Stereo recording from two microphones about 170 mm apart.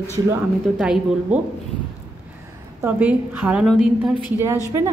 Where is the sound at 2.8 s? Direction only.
10° right (ahead or behind).